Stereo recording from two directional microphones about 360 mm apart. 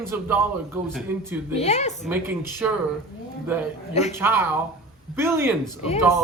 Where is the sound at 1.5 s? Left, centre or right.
Centre.